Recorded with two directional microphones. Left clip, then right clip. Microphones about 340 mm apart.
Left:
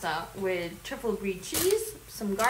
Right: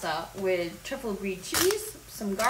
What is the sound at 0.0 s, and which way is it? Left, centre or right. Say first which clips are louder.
Speech: right 1 dB; centre.